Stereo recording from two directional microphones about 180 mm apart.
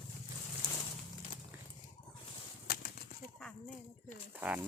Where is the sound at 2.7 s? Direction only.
60° left (ahead or behind).